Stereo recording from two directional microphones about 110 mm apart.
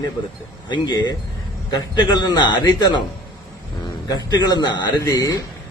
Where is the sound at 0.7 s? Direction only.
40° left (ahead or behind).